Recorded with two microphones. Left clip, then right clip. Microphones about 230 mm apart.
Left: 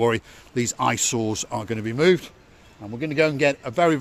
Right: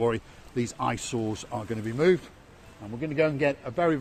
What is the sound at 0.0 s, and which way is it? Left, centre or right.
A man's voice, left.